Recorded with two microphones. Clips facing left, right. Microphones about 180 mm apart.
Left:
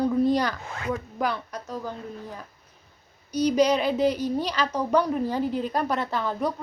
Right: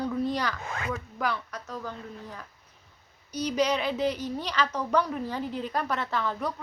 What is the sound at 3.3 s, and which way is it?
Speech, 15° left (ahead or behind).